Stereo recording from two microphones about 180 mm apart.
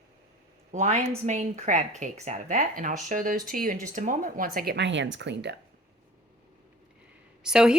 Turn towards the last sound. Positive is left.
turn(degrees=-5)  # may be behind; listen again after turning